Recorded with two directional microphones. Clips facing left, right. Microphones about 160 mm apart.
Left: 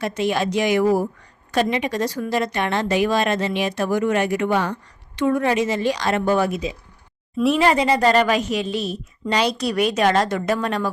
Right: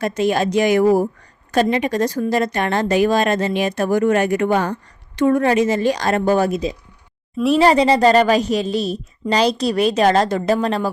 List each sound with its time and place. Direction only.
0.0 s a woman's voice: 40° right (ahead or behind)